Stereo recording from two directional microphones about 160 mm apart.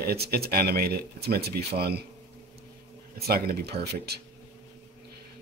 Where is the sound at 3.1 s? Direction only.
70° right (ahead or behind).